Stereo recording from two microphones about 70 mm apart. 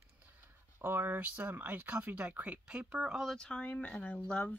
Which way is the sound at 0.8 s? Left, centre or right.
Right.